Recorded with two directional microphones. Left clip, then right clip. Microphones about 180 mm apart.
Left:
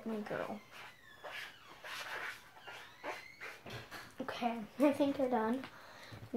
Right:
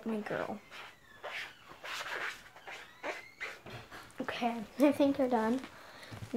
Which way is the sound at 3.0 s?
50° right (ahead or behind).